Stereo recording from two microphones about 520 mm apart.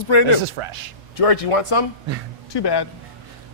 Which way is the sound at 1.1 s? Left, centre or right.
Left.